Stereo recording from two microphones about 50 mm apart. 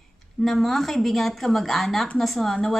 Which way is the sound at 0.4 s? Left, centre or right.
Centre.